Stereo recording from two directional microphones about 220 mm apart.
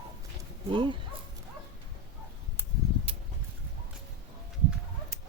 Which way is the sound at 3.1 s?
25° right (ahead or behind).